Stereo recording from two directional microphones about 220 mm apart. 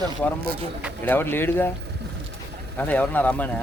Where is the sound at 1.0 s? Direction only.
10° left (ahead or behind).